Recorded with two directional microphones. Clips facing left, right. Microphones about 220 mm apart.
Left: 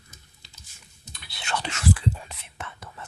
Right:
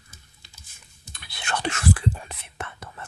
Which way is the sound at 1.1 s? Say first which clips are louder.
Right 1 dB; 50° right (ahead or behind).